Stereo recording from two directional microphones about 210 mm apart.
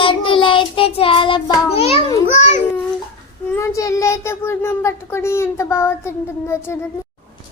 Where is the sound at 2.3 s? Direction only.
35° left (ahead or behind).